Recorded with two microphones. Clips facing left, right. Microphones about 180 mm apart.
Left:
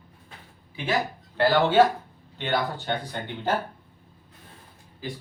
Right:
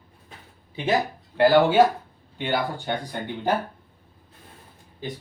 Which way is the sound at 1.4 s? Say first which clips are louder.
Right 3 dB; 15° right (ahead or behind).